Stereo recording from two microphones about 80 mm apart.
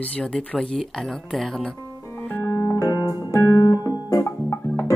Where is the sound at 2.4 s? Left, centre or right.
Left.